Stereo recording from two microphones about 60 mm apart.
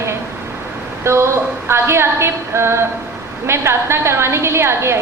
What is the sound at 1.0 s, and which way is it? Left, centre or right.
A woman's voice, right.